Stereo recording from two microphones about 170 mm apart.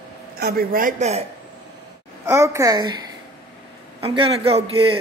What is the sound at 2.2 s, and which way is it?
Speech, 15° right (ahead or behind).